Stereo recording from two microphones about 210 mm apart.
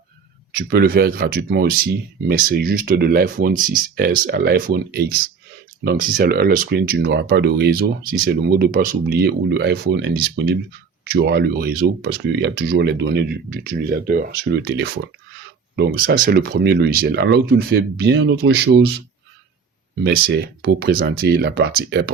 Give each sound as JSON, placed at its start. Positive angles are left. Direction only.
{"t": 0.5, "sound": "speech", "side_deg": -45}
{"t": 20.1, "sound": "speech", "side_deg": -50}